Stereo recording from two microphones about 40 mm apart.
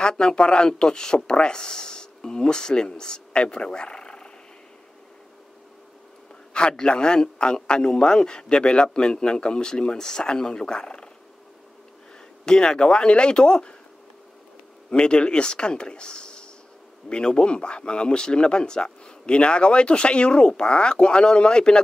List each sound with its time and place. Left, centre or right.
0.2 s speech: left
6.8 s speech: left
12.4 s speech: centre
14.9 s speech: left